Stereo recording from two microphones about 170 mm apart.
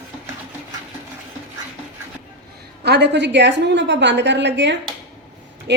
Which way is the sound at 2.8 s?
85° right.